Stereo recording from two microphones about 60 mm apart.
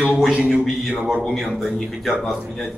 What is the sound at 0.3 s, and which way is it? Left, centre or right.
Speech, centre.